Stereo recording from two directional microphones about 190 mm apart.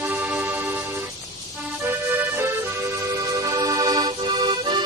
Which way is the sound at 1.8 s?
10° right (ahead or behind).